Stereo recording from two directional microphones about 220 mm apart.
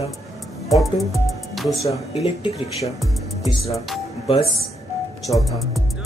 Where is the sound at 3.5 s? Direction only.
15° left (ahead or behind).